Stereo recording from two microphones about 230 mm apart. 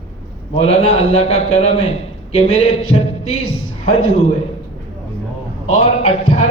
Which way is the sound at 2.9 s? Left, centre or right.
Left.